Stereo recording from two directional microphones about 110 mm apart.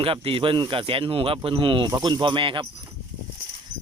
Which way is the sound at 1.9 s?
40° right (ahead or behind).